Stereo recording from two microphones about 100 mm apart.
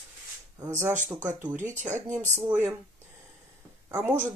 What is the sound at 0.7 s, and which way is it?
Speech, 25° right (ahead or behind).